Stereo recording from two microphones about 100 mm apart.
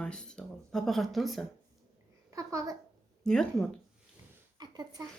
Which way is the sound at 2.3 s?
35° right (ahead or behind).